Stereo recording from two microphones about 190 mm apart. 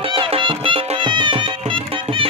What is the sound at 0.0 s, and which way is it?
Music, 30° right (ahead or behind).